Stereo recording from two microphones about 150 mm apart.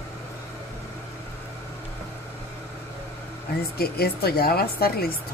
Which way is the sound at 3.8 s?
90° left.